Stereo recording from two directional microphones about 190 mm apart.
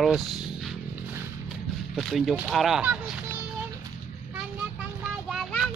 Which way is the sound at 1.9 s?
Centre (ahead or behind).